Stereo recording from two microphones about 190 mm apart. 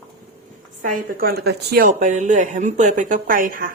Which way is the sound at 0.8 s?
45° right (ahead or behind).